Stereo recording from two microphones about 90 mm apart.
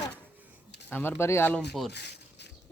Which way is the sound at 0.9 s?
25° left (ahead or behind).